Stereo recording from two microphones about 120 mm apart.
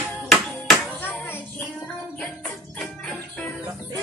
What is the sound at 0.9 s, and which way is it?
Clapping, 15° left (ahead or behind).